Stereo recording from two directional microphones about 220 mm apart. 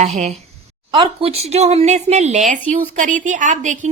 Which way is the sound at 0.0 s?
30° right (ahead or behind).